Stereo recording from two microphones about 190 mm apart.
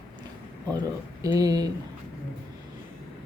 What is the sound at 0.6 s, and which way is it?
Speech, 20° right (ahead or behind).